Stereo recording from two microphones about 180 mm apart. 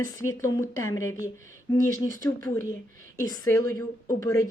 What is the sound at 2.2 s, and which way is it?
A woman's voice, 15° left (ahead or behind).